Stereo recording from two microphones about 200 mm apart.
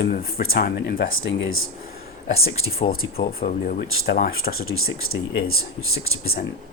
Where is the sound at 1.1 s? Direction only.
80° left.